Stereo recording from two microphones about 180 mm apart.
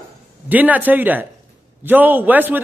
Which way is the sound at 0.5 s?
10° right (ahead or behind).